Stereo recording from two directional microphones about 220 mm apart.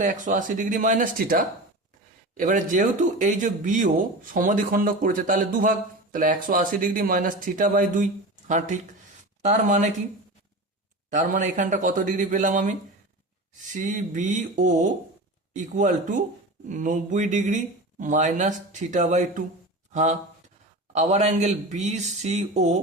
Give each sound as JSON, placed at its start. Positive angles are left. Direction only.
{"t": 0.0, "sound": "speech", "side_deg": -35}
{"t": 11.1, "sound": "speech", "side_deg": -35}
{"t": 13.7, "sound": "speech", "side_deg": -35}